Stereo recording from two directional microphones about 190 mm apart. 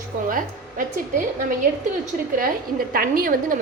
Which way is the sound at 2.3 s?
50° right (ahead or behind).